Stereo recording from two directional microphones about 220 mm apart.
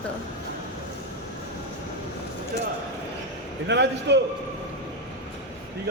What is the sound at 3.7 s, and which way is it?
Speech, 50° right (ahead or behind).